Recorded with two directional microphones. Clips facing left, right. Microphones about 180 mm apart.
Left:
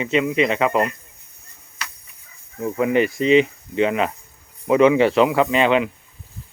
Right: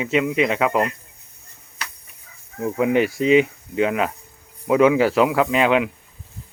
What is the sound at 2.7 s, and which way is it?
Speech, 5° right (ahead or behind).